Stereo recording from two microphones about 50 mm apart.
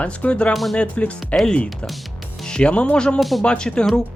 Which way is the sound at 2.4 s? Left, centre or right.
Centre.